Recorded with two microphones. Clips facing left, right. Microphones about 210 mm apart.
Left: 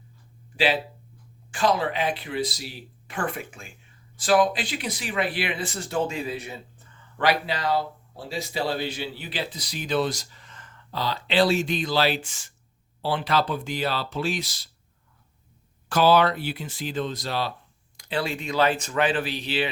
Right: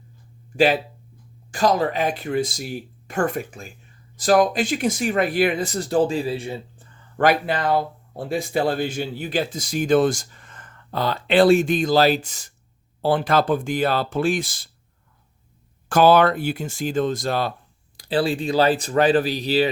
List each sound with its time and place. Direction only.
0.5 s speech: 45° right (ahead or behind); by 6.8 s 30° right (ahead or behind)
7.2 s speech: 50° right (ahead or behind)
15.9 s speech: 50° right (ahead or behind)
17.9 s speech: 35° right (ahead or behind)